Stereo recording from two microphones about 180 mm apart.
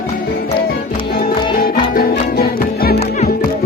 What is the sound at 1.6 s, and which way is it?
Music, 55° left (ahead or behind).